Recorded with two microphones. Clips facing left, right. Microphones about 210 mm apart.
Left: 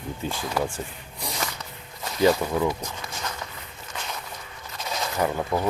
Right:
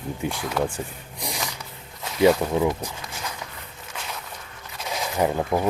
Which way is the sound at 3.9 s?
Centre (ahead or behind).